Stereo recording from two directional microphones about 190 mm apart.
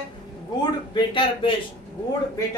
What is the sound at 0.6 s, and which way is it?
Speech, 25° left (ahead or behind).